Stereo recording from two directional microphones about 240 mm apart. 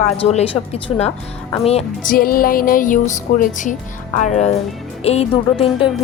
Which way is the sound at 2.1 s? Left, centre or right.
Left.